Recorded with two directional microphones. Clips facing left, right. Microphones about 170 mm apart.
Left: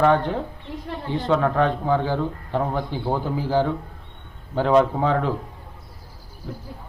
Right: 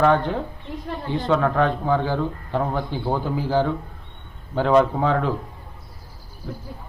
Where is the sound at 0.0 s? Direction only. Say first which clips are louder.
Even; 15° left (ahead or behind).